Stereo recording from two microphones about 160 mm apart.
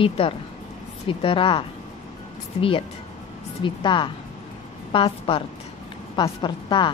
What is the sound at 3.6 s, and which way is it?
A woman's voice, 30° left (ahead or behind).